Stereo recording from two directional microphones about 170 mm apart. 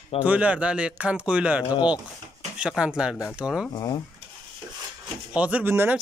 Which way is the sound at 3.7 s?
25° left (ahead or behind).